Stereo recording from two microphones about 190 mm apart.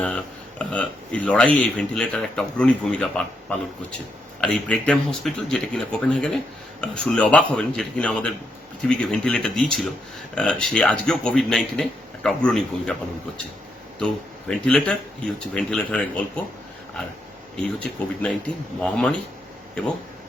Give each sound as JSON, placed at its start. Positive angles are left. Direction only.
{"t": 0.6, "sound": "a man's voice", "side_deg": 5}
{"t": 4.4, "sound": "a man's voice", "side_deg": 5}
{"t": 17.7, "sound": "a man's voice", "side_deg": 5}